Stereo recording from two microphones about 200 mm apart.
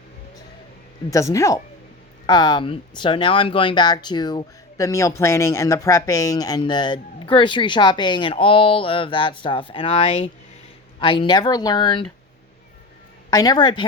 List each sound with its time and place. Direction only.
1.1 s speech: 15° left (ahead or behind)
13.3 s speech: 20° left (ahead or behind)